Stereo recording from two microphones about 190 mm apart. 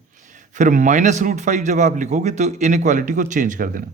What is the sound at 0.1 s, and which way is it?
A man's voice, 40° right (ahead or behind).